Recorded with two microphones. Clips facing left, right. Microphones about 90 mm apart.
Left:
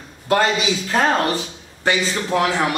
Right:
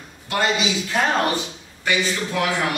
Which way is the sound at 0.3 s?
40° left (ahead or behind).